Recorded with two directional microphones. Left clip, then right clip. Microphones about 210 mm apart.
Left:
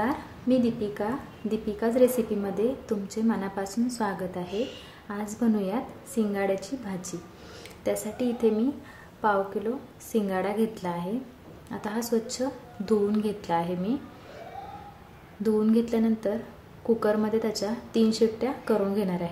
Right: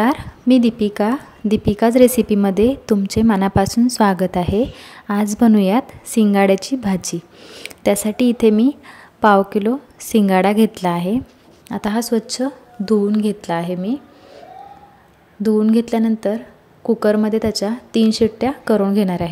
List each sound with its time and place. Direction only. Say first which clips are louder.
0.0 s a woman's voice: right 11 dB; 45° right (ahead or behind)
15.4 s a woman's voice: right 8 dB; 35° right (ahead or behind)